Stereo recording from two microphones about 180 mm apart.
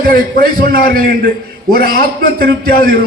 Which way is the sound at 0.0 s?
55° right (ahead or behind).